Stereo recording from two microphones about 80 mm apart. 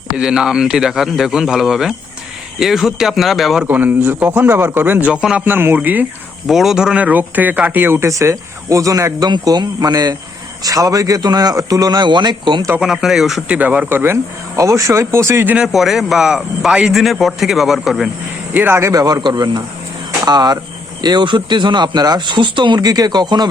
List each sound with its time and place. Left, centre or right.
0.2 s a man's voice: centre
3.6 s a man's voice: right
5.5 s a man's voice: right
6.5 s speech: centre
7.0 s speech: right
9.2 s a man's voice: right
12.8 s a man's voice: centre
13.5 s a man's voice: centre
14.5 s speech: right
15.5 s a man's voice: centre
18.5 s a man's voice: right
18.9 s a man's voice: right
19.2 s speech: right